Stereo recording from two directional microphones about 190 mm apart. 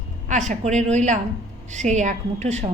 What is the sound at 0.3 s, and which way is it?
A woman's voice, 40° right (ahead or behind).